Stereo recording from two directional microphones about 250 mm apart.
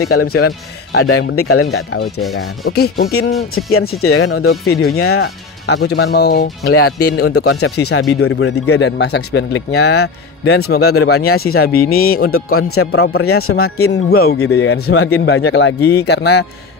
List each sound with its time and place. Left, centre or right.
0.0 s speech: left
2.7 s speech: left
3.9 s speech: left
5.7 s speech: left
7.1 s speech: left
8.7 s speech: left
10.4 s speech: left
11.0 s speech: left
11.6 s speech: left
12.3 s speech: left
14.1 s speech: left
14.4 s speech: left